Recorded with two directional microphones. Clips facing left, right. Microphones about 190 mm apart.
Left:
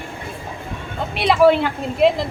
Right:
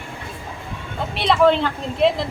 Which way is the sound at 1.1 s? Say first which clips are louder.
Left 2 dB; 5° left (ahead or behind).